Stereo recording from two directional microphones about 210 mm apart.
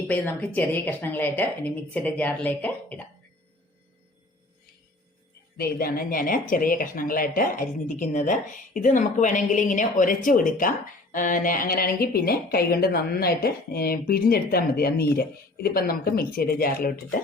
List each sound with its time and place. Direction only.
0.1 s a woman's voice: 10° left (ahead or behind)
5.5 s speech: 45° left (ahead or behind)